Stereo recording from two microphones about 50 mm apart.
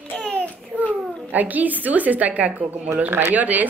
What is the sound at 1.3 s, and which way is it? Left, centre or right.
Speech, right.